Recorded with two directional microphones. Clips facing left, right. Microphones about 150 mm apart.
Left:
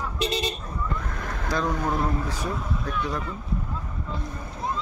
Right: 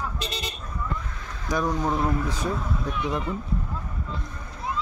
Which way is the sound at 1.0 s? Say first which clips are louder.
Left 6 dB; 55° left (ahead or behind).